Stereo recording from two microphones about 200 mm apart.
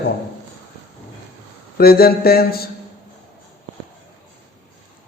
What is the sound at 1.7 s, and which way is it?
Speech, 50° left (ahead or behind).